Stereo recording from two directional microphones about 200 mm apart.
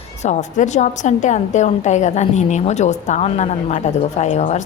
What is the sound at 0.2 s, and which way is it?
A woman's voice, 35° left (ahead or behind).